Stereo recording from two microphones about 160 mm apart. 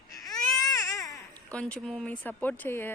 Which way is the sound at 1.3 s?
10° left (ahead or behind).